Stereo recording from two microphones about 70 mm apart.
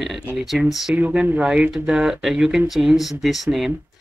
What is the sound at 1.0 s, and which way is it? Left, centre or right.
Speech, right.